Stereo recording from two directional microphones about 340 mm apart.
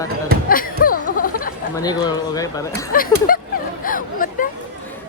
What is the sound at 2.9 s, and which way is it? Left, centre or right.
Speech, left.